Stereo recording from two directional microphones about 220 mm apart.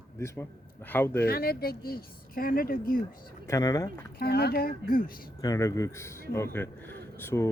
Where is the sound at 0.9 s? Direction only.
10° left (ahead or behind).